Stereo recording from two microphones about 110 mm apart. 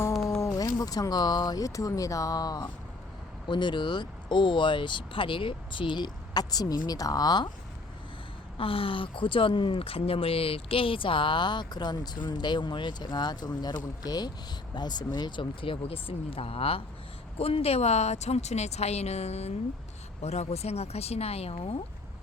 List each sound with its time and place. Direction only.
0.4 s speech: 35° left (ahead or behind)
3.5 s speech: 45° left (ahead or behind)
8.5 s speech: 55° left (ahead or behind)